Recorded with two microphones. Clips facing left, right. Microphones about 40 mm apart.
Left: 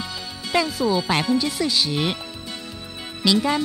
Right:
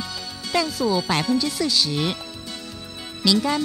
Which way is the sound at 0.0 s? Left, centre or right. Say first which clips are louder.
Left 1 dB; left.